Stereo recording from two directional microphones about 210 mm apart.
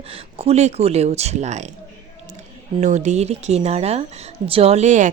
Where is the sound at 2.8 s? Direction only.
35° right (ahead or behind).